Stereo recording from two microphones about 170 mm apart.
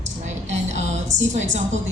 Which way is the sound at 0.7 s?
45° right (ahead or behind).